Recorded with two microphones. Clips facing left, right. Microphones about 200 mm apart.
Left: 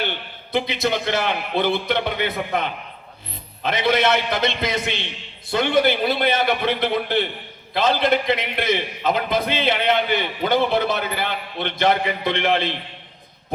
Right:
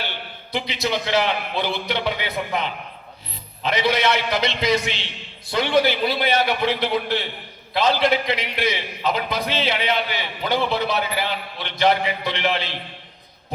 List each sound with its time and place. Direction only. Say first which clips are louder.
0.5 s a man's voice: left 3 dB; 55° left (ahead or behind)